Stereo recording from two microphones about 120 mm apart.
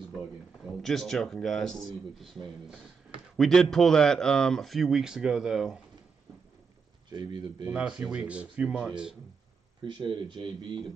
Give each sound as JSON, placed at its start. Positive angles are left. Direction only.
{"t": 0.8, "sound": "speech", "side_deg": 0}
{"t": 7.1, "sound": "speech", "side_deg": -35}
{"t": 7.7, "sound": "speech", "side_deg": -10}
{"t": 9.8, "sound": "speech", "side_deg": -40}